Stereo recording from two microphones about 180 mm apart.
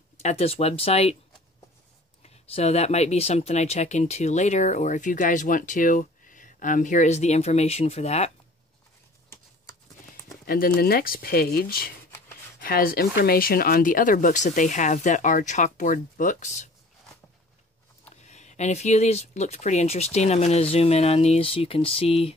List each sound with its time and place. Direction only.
0.2 s speech: 35° left (ahead or behind)
2.2 s speech: 35° left (ahead or behind)
10.4 s speech: 55° left (ahead or behind)
18.1 s speech: 40° left (ahead or behind)